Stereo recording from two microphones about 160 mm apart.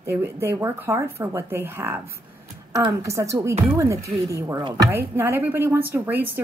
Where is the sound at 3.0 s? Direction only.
20° right (ahead or behind).